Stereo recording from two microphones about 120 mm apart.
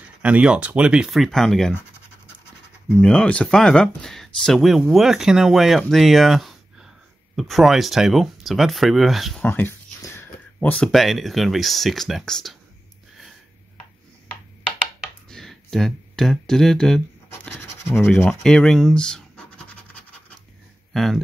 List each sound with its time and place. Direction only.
0.2 s speech: 10° right (ahead or behind)
1.7 s scratch: 20° left (ahead or behind)
3.0 s speech: 10° left (ahead or behind)
9.4 s a sound: 15° left (ahead or behind)
10.9 s speech: centre (ahead or behind)
15.2 s speech: 5° left (ahead or behind)
18.4 s scratch: 5° left (ahead or behind)
20.9 s speech: centre (ahead or behind)